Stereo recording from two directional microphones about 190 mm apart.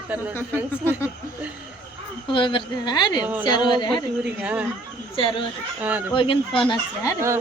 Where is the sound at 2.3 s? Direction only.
25° left (ahead or behind).